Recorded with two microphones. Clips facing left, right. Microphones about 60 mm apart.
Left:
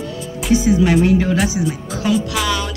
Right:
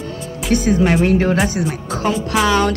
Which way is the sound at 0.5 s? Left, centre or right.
Right.